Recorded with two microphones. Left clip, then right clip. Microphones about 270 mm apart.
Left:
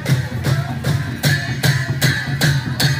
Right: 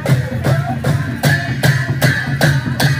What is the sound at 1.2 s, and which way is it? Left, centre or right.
Music, centre.